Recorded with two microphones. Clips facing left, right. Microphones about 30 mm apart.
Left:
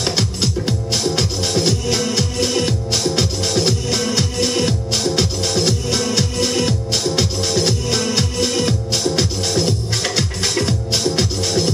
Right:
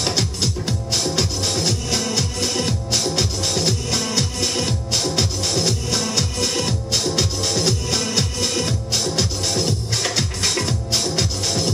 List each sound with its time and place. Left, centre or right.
0.0 s music: centre